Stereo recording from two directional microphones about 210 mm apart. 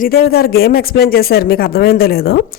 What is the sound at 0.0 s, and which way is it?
Speech, 45° left (ahead or behind).